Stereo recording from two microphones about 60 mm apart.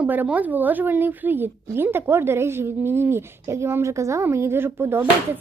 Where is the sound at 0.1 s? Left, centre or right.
Right.